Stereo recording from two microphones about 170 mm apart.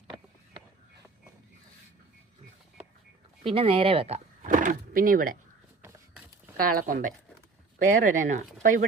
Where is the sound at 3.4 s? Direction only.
35° right (ahead or behind).